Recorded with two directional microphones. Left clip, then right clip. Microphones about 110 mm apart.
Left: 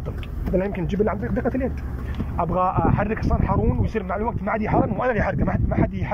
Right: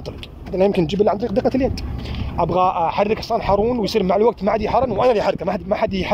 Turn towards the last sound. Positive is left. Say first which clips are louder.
# right 6 dB
turn(degrees=-40)  # may be behind; listen again after turning